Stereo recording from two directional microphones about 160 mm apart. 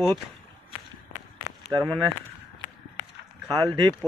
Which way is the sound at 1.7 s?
15° right (ahead or behind).